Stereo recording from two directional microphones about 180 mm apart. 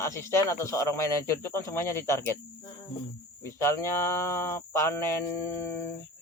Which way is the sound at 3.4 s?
15° left (ahead or behind).